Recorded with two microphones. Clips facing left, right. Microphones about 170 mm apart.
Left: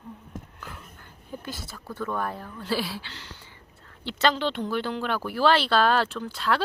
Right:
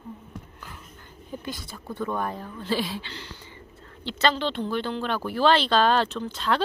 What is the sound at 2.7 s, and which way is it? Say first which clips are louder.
Speech: right 1 dB; 10° left (ahead or behind).